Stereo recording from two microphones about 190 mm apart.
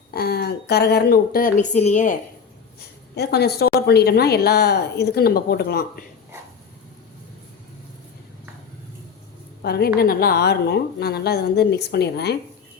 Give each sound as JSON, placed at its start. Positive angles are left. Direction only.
{"t": 0.1, "sound": "a woman's voice", "side_deg": 55}
{"t": 3.2, "sound": "a woman's voice", "side_deg": 60}
{"t": 9.6, "sound": "a woman's voice", "side_deg": 55}